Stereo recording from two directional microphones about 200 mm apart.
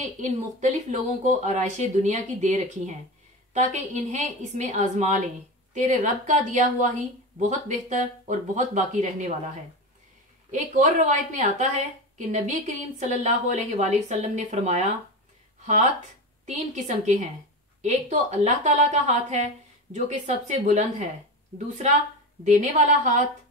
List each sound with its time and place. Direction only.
0.0 s a woman's voice: 40° right (ahead or behind)
10.5 s a woman's voice: 40° right (ahead or behind)
16.4 s a woman's voice: 35° right (ahead or behind)
22.4 s a woman's voice: 35° right (ahead or behind)